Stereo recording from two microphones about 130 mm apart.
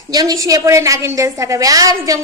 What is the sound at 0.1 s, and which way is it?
A woman's voice, 30° right (ahead or behind).